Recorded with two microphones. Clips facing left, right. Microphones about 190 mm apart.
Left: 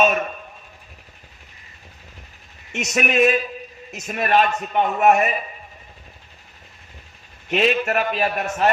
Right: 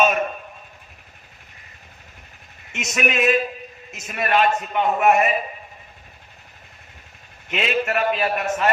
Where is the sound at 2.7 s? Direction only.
45° left (ahead or behind).